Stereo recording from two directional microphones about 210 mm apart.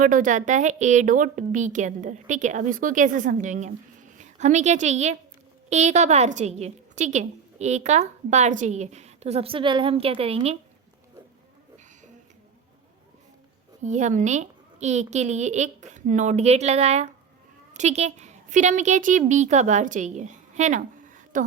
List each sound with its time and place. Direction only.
0.0 s a woman's voice: 40° right (ahead or behind)
13.8 s a woman's voice: 35° right (ahead or behind)